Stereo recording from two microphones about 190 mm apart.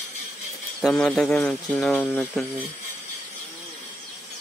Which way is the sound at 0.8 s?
Centre (ahead or behind).